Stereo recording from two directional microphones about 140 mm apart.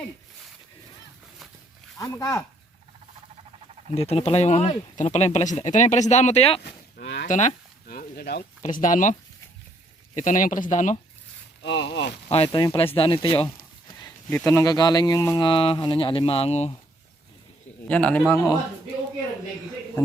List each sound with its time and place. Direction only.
2.0 s speech: 25° left (ahead or behind)
3.9 s speech: 45° left (ahead or behind)
6.9 s speech: 60° left (ahead or behind)
10.2 s speech: 65° left (ahead or behind)
12.3 s speech: 40° left (ahead or behind)
14.3 s speech: 15° left (ahead or behind)
15.4 s speech: 35° left (ahead or behind)
17.8 s a man's voice: 10° left (ahead or behind)
18.3 s speech: 20° left (ahead or behind)